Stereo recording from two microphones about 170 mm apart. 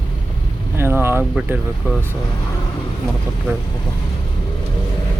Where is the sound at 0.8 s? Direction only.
15° right (ahead or behind).